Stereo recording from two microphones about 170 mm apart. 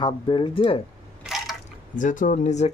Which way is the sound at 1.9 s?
50° left (ahead or behind).